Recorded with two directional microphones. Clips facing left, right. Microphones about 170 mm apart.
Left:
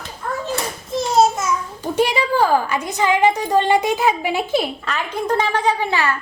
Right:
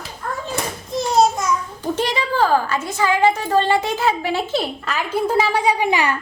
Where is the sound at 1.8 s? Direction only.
10° left (ahead or behind).